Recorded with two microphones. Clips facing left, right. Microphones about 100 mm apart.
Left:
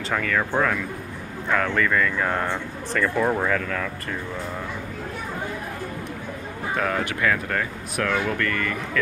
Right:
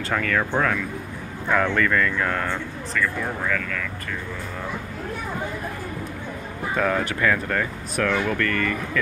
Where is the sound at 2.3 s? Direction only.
15° left (ahead or behind).